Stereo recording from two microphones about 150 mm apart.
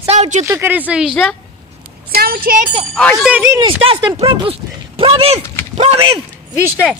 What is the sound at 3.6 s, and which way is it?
Speech, 35° right (ahead or behind).